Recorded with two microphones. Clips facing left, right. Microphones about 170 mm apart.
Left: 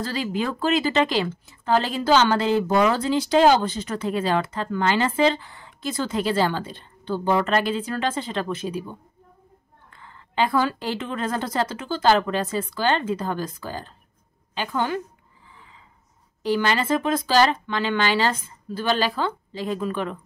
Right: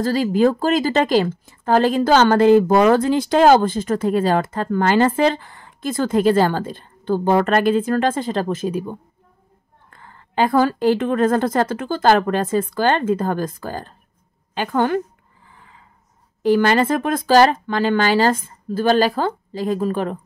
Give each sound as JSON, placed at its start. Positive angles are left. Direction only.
{"t": 0.0, "sound": "speech", "side_deg": -45}
{"t": 15.4, "sound": "a sound", "side_deg": -50}
{"t": 16.4, "sound": "speech", "side_deg": -50}